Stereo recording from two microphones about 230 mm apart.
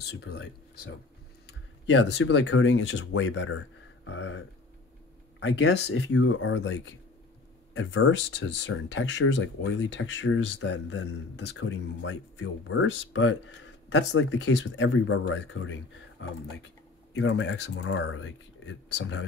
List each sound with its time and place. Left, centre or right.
0.1 s speech: left
5.4 s speech: left